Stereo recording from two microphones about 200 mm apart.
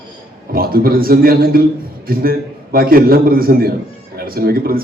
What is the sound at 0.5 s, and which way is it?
A man's voice, 50° right (ahead or behind).